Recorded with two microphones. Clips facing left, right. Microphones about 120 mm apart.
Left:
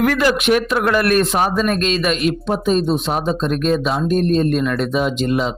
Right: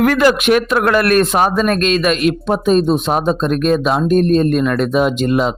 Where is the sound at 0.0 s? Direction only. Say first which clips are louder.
Right 4 dB; 55° right (ahead or behind).